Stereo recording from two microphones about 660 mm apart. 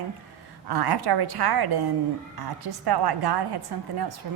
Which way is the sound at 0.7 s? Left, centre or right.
Right.